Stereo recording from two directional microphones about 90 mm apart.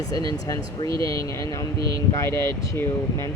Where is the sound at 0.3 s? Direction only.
40° left (ahead or behind).